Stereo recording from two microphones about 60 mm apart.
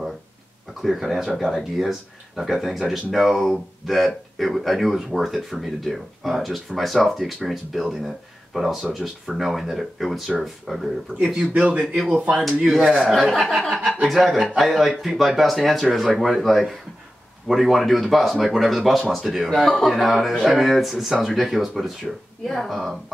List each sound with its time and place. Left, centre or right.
0.8 s speech: centre
11.5 s a man's voice: right
12.6 s speech: centre
12.9 s speech: centre
13.3 s speech: centre